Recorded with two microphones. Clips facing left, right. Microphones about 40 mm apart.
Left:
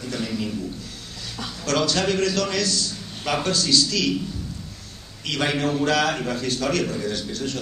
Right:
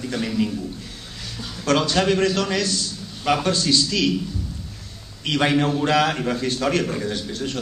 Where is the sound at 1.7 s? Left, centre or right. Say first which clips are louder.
Right 3 dB; centre.